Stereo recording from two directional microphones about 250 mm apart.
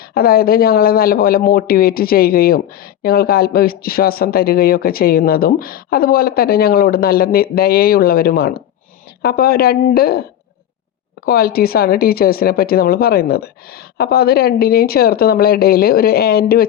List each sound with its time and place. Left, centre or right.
0.1 s speech: left
11.3 s speech: left